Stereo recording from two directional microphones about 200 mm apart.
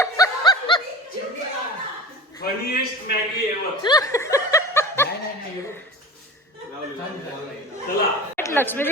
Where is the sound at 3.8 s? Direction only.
20° left (ahead or behind).